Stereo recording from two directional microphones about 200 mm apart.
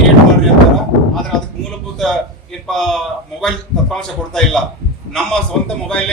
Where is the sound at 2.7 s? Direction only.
Centre (ahead or behind).